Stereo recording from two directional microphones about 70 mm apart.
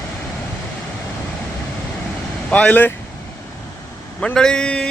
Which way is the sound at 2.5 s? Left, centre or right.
Centre.